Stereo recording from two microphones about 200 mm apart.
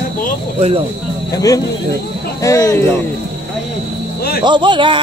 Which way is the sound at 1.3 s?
15° left (ahead or behind).